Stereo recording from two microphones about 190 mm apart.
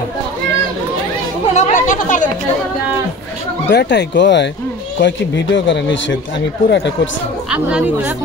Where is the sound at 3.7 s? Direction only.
65° left (ahead or behind).